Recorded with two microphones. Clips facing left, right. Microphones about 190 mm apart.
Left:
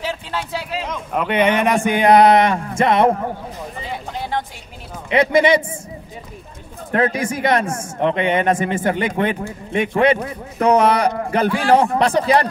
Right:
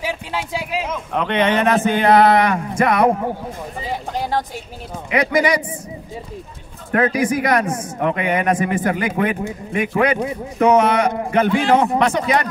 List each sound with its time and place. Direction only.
0.0 s a sound: 10° right (ahead or behind)
1.1 s speech: 10° left (ahead or behind); by 3.1 s 25° left (ahead or behind)
4.2 s a sound: 40° right (ahead or behind)
5.1 s speech: 25° left (ahead or behind)
6.9 s speech: 25° left (ahead or behind)
11.4 s a man's voice: 20° right (ahead or behind)
12.0 s speech: 35° left (ahead or behind)